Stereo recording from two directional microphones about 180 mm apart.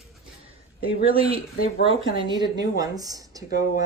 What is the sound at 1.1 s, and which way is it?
A woman's voice, 30° right (ahead or behind).